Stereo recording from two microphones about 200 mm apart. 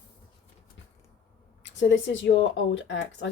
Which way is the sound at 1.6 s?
65° left (ahead or behind).